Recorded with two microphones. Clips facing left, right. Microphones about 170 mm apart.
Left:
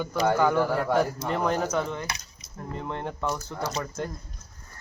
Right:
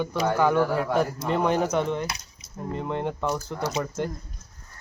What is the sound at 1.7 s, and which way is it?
Speech, 25° right (ahead or behind).